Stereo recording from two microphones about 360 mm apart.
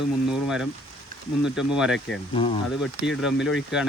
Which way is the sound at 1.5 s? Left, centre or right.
Centre.